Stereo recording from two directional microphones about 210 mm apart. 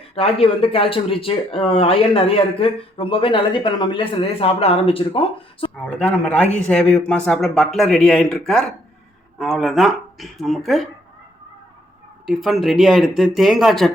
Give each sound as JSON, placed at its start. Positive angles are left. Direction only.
{"t": 0.2, "sound": "speech", "side_deg": 25}
{"t": 5.8, "sound": "speech", "side_deg": 5}
{"t": 12.2, "sound": "speech", "side_deg": 0}